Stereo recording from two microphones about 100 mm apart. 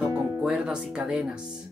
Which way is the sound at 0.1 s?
10° right (ahead or behind).